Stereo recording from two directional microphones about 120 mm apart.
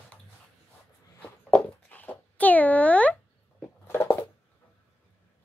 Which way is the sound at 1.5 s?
10° left (ahead or behind).